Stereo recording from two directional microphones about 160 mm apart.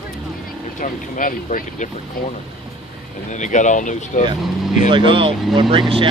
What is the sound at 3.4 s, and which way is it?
Speech, 50° left (ahead or behind).